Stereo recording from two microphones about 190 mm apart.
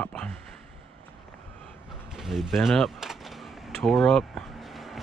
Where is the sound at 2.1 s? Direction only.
Centre (ahead or behind).